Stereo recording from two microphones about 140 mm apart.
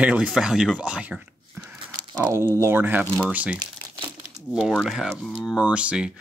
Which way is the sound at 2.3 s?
20° right (ahead or behind).